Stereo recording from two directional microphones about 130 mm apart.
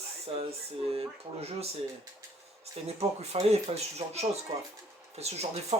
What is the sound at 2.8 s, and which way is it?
Speech, 55° right (ahead or behind).